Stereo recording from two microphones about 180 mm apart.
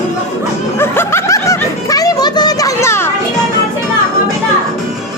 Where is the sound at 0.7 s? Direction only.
15° left (ahead or behind).